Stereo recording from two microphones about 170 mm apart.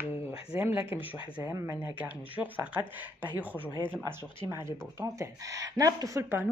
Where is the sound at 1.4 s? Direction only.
15° right (ahead or behind).